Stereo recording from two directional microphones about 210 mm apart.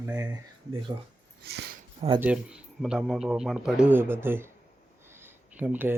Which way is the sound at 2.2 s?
5° right (ahead or behind).